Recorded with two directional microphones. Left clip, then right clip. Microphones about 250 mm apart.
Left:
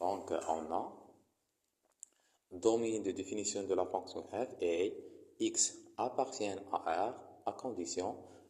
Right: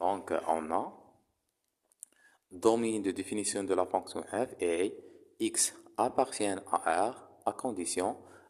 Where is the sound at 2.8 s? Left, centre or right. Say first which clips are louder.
Right 3 dB; right.